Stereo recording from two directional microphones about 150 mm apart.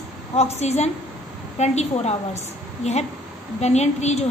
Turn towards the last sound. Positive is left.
turn(degrees=45)  # may be behind; listen again after turning